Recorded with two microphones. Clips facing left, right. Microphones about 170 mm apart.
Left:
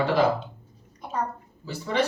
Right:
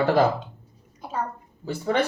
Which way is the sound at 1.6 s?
50° right (ahead or behind).